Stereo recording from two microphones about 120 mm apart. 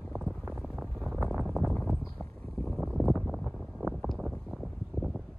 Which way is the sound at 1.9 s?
Centre (ahead or behind).